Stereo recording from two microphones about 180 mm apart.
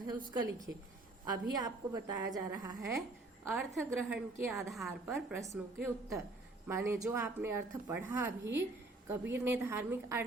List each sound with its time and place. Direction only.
0.3 s a woman's voice: 20° right (ahead or behind)
4.7 s a woman's voice: centre (ahead or behind)
5.8 s speech: 15° right (ahead or behind)